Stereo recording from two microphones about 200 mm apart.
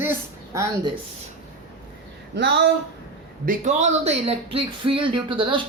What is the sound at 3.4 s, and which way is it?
Speech, 35° right (ahead or behind).